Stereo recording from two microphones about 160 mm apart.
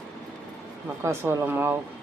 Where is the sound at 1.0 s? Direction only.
15° right (ahead or behind).